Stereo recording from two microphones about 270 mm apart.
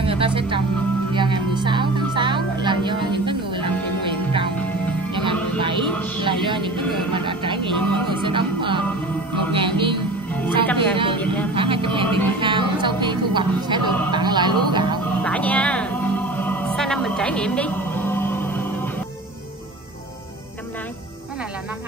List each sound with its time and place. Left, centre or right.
0.0 s music: centre
5.1 s music: centre
10.8 s a sound: centre
11.5 s speech: centre
12.4 s music: centre
14.1 s a sound: centre
15.2 s music: centre